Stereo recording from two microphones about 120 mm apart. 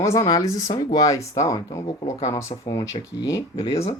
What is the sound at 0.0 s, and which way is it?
Speech, 30° left (ahead or behind).